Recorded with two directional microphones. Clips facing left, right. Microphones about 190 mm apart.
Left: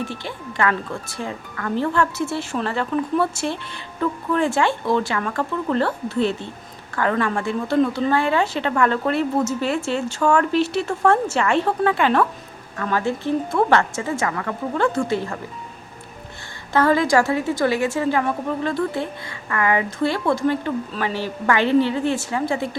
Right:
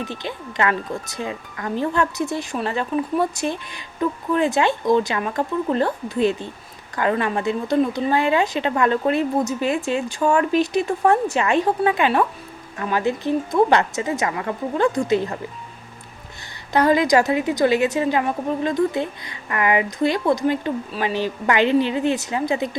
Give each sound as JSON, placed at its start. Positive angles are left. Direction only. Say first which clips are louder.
{"t": 0.0, "sound": "speech", "louder": "even", "side_deg": -20}
{"t": 16.7, "sound": "speech", "louder": "right 1 dB", "side_deg": -15}